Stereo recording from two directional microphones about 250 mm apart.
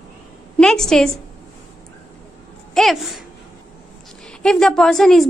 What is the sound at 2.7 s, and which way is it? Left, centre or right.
Speech, centre.